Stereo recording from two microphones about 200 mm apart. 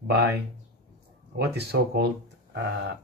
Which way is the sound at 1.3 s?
55° right (ahead or behind).